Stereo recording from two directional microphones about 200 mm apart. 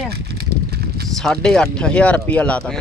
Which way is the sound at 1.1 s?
5° left (ahead or behind).